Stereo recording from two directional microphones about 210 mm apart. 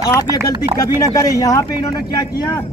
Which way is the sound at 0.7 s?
15° left (ahead or behind).